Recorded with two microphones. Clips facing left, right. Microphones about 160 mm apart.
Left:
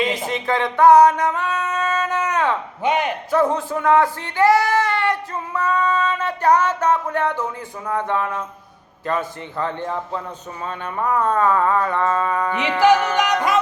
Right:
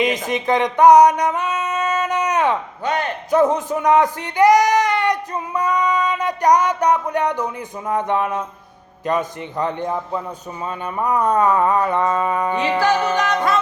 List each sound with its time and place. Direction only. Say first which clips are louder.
0.0 s a sound: right 2 dB; 20° right (ahead or behind)
2.8 s speech: left 3 dB; 15° left (ahead or behind)
3.2 s speech: right 5 dB; 20° right (ahead or behind)
13.1 s music: even; 15° left (ahead or behind)